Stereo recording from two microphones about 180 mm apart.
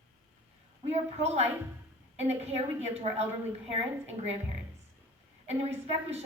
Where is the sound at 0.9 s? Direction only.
35° right (ahead or behind).